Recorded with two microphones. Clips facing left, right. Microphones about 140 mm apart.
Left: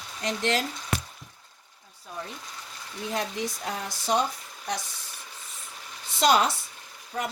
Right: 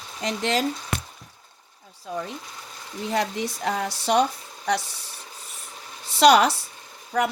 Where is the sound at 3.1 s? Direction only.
75° right (ahead or behind).